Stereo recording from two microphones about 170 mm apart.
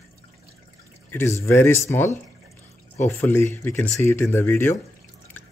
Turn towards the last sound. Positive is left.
turn(degrees=15)  # may be behind; listen again after turning